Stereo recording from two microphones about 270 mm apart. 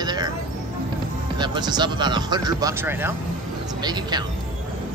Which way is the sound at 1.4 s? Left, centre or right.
Centre.